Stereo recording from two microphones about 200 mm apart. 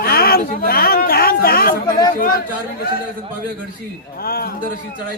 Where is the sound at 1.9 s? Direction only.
20° left (ahead or behind).